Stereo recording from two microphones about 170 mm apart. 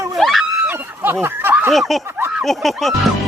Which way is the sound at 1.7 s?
Centre (ahead or behind).